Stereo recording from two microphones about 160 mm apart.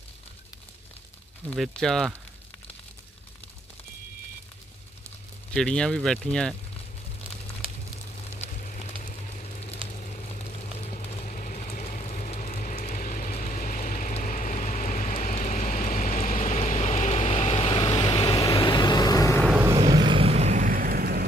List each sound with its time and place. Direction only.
1.5 s speech: centre (ahead or behind)
5.5 s speech: 5° left (ahead or behind)
8.3 s a sound: 50° left (ahead or behind)
9.9 s vehicle: 50° left (ahead or behind); by 19.4 s 20° left (ahead or behind)
19.4 s vehicle: 5° right (ahead or behind)
19.9 s vehicle: 30° right (ahead or behind); by 21.2 s 70° right (ahead or behind)